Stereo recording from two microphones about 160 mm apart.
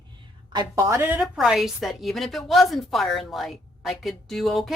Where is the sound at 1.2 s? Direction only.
Centre (ahead or behind).